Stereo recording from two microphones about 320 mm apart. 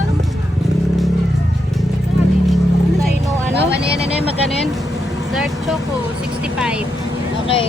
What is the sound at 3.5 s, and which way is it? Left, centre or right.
Vehicle, right.